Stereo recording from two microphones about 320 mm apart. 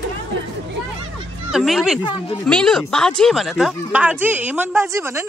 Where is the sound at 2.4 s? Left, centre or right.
Centre.